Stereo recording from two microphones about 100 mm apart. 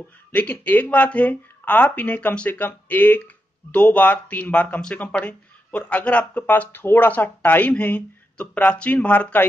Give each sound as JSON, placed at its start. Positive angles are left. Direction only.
{"t": 0.3, "sound": "speech", "side_deg": 15}